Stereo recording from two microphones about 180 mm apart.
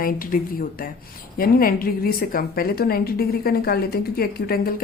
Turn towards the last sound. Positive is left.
turn(degrees=55)  # may be behind; listen again after turning